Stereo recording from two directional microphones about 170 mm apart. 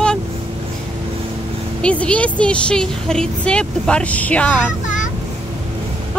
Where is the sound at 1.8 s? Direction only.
5° left (ahead or behind).